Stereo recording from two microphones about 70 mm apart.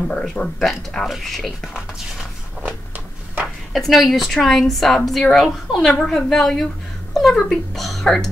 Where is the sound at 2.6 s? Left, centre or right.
Right.